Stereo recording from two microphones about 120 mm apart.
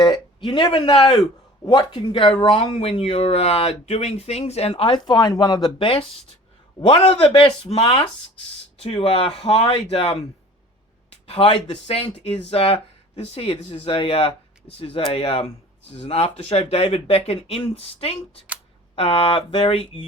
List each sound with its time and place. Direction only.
0.0 s a sound: 40° left (ahead or behind)
0.7 s speech: 50° left (ahead or behind)
5.0 s speech: 35° left (ahead or behind); by 10.2 s 55° left (ahead or behind)
11.3 s speech: 50° left (ahead or behind)